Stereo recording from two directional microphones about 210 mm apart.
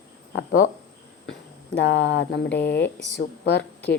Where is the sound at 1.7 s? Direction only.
60° left (ahead or behind).